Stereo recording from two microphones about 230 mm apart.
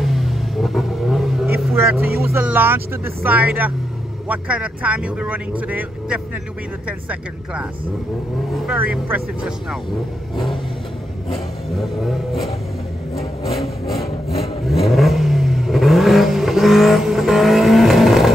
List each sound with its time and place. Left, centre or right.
0.0 s vehicle: centre
2.2 s a man's voice: centre
8.6 s speech: centre
11.7 s a man's voice: centre
13.2 s vehicle: left
13.6 s vehicle: centre